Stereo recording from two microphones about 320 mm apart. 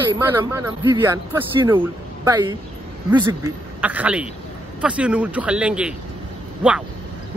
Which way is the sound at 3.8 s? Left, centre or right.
Centre.